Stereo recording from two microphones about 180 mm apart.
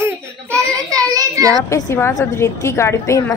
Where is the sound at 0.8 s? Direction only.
20° right (ahead or behind).